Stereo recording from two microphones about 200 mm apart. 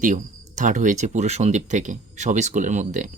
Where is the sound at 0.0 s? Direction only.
40° right (ahead or behind).